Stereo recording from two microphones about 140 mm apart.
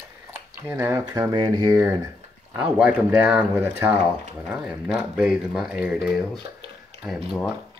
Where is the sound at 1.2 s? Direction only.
30° right (ahead or behind).